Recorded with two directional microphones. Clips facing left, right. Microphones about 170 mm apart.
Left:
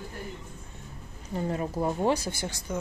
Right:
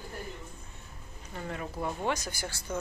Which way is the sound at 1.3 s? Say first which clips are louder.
Left 8 dB; 35° left (ahead or behind).